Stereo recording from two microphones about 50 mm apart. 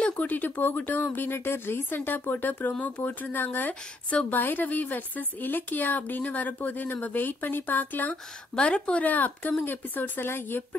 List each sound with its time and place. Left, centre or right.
0.0 s a woman's voice: left
8.1 s a woman's voice: left